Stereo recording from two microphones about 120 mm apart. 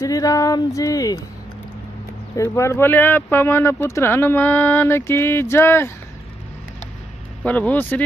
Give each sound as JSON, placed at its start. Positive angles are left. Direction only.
{"t": 0.0, "sound": "speech", "side_deg": 30}
{"t": 2.3, "sound": "speech", "side_deg": 25}
{"t": 7.4, "sound": "speech", "side_deg": 10}